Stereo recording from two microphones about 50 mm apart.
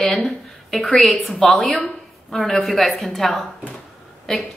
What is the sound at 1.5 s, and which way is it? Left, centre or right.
A woman's voice, centre.